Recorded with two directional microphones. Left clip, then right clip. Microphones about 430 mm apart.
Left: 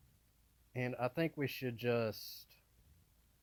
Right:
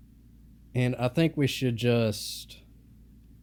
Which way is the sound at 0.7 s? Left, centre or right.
Centre.